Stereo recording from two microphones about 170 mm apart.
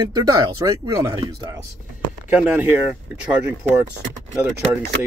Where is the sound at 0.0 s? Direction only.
20° right (ahead or behind).